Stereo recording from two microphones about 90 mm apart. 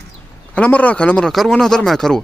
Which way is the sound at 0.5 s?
15° left (ahead or behind).